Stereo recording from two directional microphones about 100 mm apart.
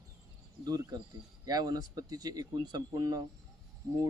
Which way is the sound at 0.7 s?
40° right (ahead or behind).